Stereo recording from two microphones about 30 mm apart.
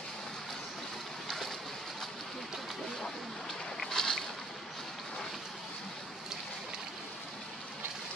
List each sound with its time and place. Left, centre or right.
3.8 s boat: centre